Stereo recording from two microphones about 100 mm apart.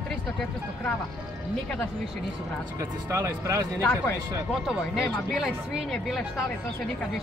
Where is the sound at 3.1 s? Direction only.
30° right (ahead or behind).